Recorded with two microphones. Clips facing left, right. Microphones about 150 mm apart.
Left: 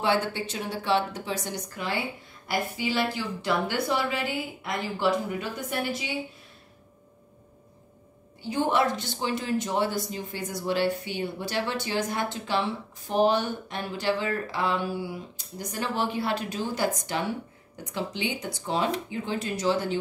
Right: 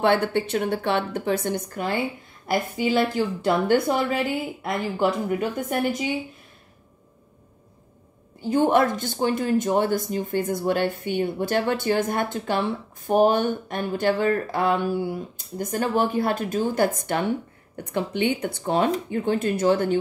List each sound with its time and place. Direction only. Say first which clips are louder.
0.0 s speech: right 5 dB; 55° right (ahead or behind)
8.4 s speech: right 6 dB; 50° right (ahead or behind)